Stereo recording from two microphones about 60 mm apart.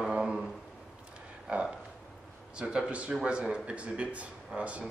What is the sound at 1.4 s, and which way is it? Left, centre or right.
A man's voice, centre.